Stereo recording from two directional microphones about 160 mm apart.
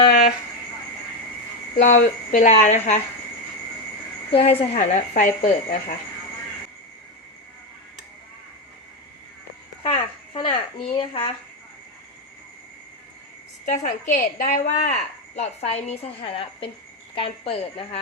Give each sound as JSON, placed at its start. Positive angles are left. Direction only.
{"t": 0.0, "sound": "a sound", "side_deg": 45}
{"t": 1.8, "sound": "a woman's voice", "side_deg": 50}
{"t": 4.3, "sound": "a woman's voice", "side_deg": 35}
{"t": 9.8, "sound": "a woman's voice", "side_deg": 30}
{"t": 13.7, "sound": "a woman's voice", "side_deg": 50}
{"t": 15.4, "sound": "a woman's voice", "side_deg": 40}